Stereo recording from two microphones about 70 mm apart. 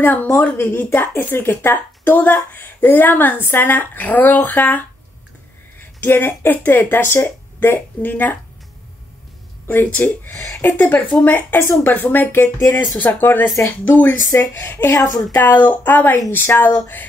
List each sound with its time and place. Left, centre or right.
0.0 s speech: left
9.7 s speech: left